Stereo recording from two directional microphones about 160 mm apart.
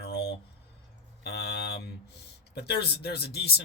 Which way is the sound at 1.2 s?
90° left.